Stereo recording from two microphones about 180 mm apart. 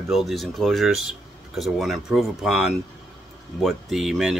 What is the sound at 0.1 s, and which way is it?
Speech, centre (ahead or behind).